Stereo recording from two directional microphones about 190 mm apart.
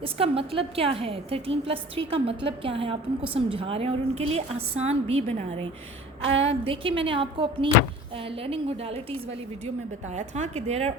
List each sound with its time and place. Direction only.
0.0 s a woman's voice: 30° right (ahead or behind)